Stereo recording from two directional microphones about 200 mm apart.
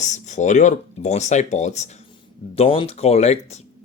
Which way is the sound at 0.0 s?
35° left (ahead or behind).